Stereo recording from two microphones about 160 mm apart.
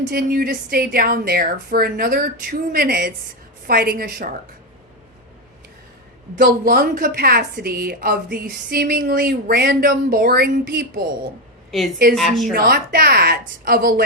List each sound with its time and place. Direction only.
0.1 s a woman's voice: 65° right (ahead or behind)
6.4 s a woman's voice: 70° right (ahead or behind)
12.1 s a woman's voice: centre (ahead or behind)
12.5 s a woman's voice: 70° right (ahead or behind)